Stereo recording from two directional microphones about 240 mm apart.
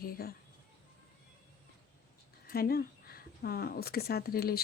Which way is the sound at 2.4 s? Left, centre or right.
Left.